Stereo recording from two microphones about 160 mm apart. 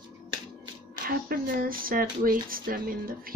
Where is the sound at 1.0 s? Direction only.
65° right (ahead or behind).